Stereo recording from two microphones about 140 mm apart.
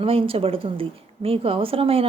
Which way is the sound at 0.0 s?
40° right (ahead or behind).